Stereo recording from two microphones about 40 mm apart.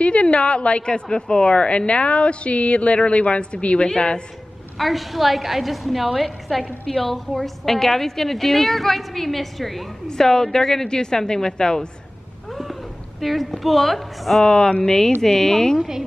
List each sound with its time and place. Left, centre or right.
0.0 s a woman's voice: left
4.7 s a woman's voice: centre
10.0 s a woman's voice: centre
13.2 s a woman's voice: centre
14.4 s a woman's voice: left